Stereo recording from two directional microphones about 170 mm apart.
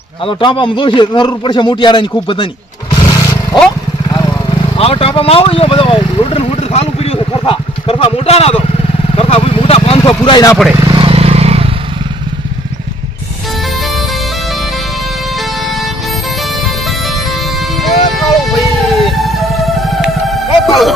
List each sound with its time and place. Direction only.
0.2 s a man's voice: 30° left (ahead or behind)
2.9 s motorcycle: 25° left (ahead or behind)
4.6 s speech: 35° left (ahead or behind)
9.1 s vehicle: 35° left (ahead or behind)
10.8 s vehicle: 30° right (ahead or behind)
13.7 s bagpipes: centre (ahead or behind)
15.4 s music: centre (ahead or behind)